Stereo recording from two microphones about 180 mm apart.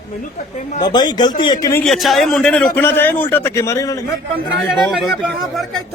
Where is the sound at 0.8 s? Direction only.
25° left (ahead or behind).